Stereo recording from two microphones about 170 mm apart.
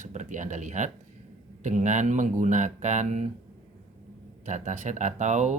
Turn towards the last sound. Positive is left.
turn(degrees=-45)  # may be behind; listen again after turning